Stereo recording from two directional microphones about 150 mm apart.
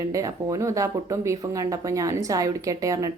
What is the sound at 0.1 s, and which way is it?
A woman's voice, 20° right (ahead or behind).